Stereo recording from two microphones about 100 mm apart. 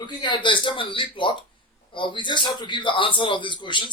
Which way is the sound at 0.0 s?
50° left (ahead or behind).